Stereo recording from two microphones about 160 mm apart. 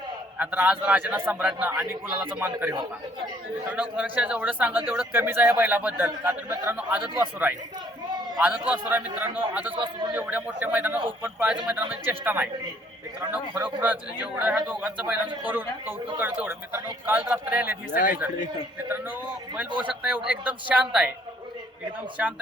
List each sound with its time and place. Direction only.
0.3 s speech: 10° right (ahead or behind)
17.9 s speech: 60° left (ahead or behind)
19.8 s speech: 10° right (ahead or behind)